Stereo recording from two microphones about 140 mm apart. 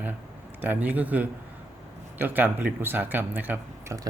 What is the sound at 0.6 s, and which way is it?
Speech, 10° right (ahead or behind).